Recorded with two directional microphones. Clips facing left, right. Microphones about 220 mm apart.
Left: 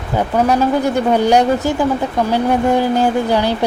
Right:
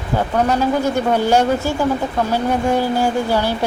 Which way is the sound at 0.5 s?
15° left (ahead or behind).